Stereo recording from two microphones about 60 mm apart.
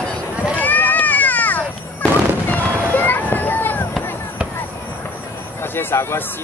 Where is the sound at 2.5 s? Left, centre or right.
Left.